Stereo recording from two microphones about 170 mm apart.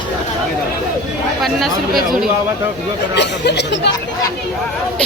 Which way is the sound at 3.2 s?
85° left.